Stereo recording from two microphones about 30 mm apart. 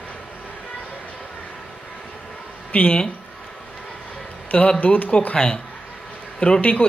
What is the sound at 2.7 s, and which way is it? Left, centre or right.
Speech, left.